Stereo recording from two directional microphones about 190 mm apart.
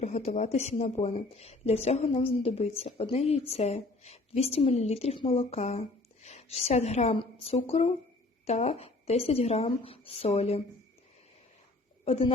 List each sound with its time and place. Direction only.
0.0 s a sound: 35° left (ahead or behind)
0.3 s a woman's voice: 35° left (ahead or behind)
12.0 s a woman's voice: 30° left (ahead or behind)